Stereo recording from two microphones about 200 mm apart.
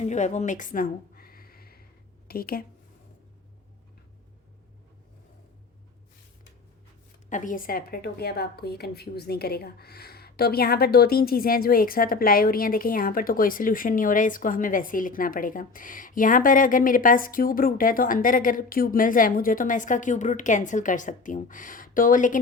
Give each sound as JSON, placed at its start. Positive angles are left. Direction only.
{"t": 0.0, "sound": "a sound", "side_deg": 35}
{"t": 2.2, "sound": "speech", "side_deg": 50}
{"t": 7.3, "sound": "a woman's voice", "side_deg": 40}